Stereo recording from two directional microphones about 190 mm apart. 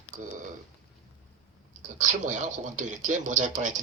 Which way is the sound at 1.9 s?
40° right (ahead or behind).